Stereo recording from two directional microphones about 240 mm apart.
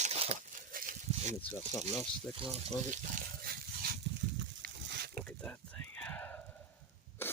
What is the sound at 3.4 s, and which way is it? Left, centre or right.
Dog, right.